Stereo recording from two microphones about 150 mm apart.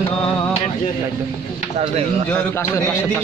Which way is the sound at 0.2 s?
40° left (ahead or behind).